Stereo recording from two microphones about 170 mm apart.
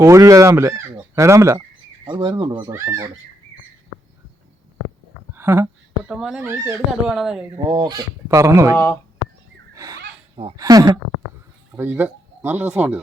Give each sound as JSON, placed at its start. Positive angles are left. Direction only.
{"t": 0.0, "sound": "speech", "side_deg": -20}
{"t": 2.0, "sound": "speech", "side_deg": -25}
{"t": 2.5, "sound": "speech", "side_deg": -15}
{"t": 5.3, "sound": "a sound", "side_deg": -15}
{"t": 6.1, "sound": "speech", "side_deg": -5}
{"t": 7.5, "sound": "speech", "side_deg": -25}
{"t": 9.7, "sound": "a sound", "side_deg": -20}
{"t": 10.6, "sound": "speech", "side_deg": -20}
{"t": 11.8, "sound": "speech", "side_deg": -10}